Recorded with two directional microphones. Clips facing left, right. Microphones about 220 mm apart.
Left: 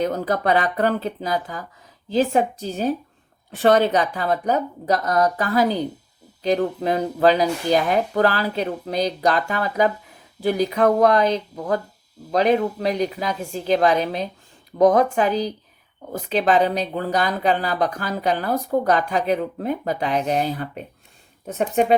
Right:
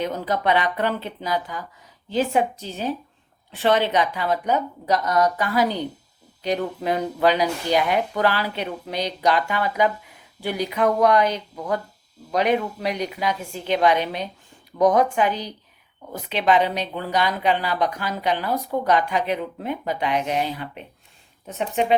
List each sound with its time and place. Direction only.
0.0 s speech: 40° left (ahead or behind)